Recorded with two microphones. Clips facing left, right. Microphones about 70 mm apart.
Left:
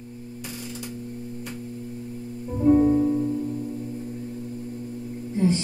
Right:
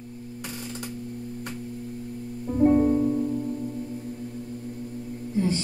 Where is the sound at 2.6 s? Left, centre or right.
Right.